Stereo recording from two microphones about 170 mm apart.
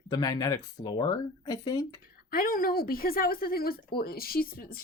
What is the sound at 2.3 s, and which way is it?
Speech, 60° left (ahead or behind).